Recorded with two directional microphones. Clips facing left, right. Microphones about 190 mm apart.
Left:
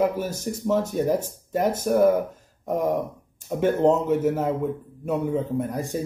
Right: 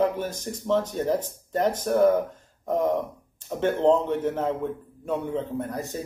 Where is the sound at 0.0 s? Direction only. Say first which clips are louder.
Left 1 dB; 10° left (ahead or behind).